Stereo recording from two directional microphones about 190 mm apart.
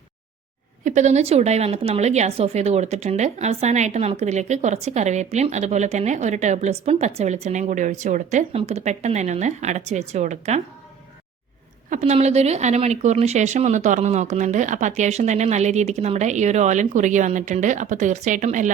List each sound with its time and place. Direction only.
0.9 s a woman's voice: 40° right (ahead or behind)
11.9 s a woman's voice: 35° right (ahead or behind)